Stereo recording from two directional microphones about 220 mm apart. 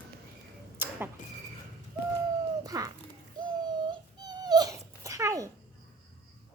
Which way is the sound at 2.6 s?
15° right (ahead or behind).